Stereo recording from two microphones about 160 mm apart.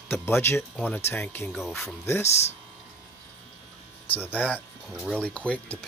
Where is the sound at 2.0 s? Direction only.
15° left (ahead or behind).